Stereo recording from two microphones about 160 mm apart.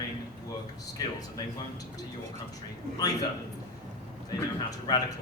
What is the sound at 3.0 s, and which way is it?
Speech, 25° left (ahead or behind).